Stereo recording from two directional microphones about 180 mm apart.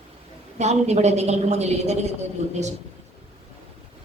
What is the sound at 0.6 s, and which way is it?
A woman's voice, 40° right (ahead or behind).